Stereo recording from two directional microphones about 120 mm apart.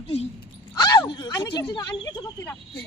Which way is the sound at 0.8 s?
35° left (ahead or behind).